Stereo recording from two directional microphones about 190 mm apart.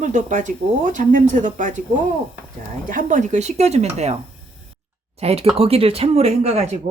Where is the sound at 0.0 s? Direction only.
40° right (ahead or behind).